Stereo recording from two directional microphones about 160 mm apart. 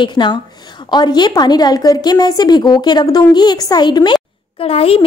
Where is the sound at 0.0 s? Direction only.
30° left (ahead or behind).